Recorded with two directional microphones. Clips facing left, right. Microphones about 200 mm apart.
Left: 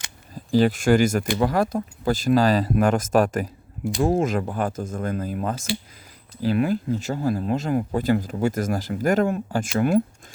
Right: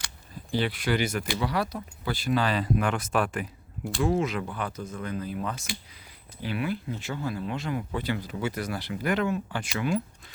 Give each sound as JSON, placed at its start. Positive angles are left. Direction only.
{"t": 0.3, "sound": "speech", "side_deg": 40}